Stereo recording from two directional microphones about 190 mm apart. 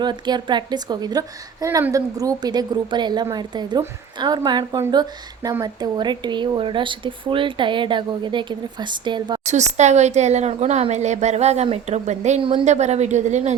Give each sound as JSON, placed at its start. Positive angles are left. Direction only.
{"t": 0.0, "sound": "a woman's voice", "side_deg": -25}
{"t": 9.4, "sound": "speech", "side_deg": -35}